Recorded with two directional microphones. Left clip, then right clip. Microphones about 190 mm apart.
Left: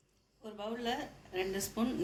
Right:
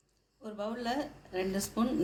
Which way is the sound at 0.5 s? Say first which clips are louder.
Right 3 dB; 40° right (ahead or behind).